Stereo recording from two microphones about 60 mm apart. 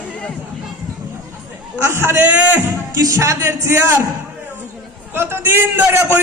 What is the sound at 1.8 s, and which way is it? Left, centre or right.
Speech, right.